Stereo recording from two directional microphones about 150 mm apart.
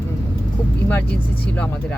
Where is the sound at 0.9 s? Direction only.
10° left (ahead or behind).